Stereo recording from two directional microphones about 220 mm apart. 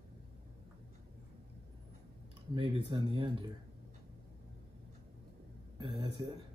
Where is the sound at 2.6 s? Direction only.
20° right (ahead or behind).